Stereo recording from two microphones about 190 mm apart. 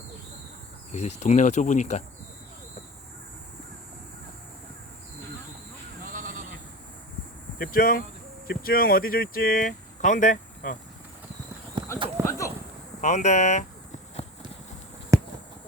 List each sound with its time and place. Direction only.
0.9 s speech: 35° left (ahead or behind)
6.1 s sheep: 45° right (ahead or behind)
7.6 s speech: 50° left (ahead or behind)
11.8 s clip-clop: 25° right (ahead or behind)
12.2 s a sound: 15° left (ahead or behind)
13.0 s speech: 40° left (ahead or behind)
15.1 s a sound: 15° right (ahead or behind)